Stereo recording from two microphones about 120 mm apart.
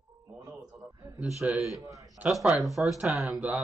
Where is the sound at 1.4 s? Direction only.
5° right (ahead or behind).